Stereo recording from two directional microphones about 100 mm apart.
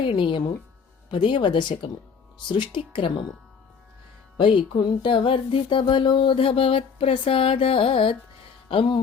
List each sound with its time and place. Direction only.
0.2 s speech: 50° left (ahead or behind)
2.5 s music: 55° left (ahead or behind)
4.4 s music: 55° left (ahead or behind)